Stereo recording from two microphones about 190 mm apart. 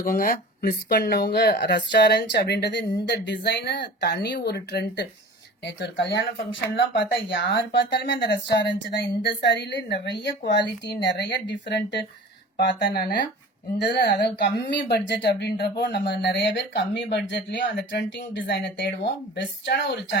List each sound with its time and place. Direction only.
0.0 s speech: 50° left (ahead or behind)
6.5 s speech: 75° left (ahead or behind)
12.5 s speech: 55° left (ahead or behind)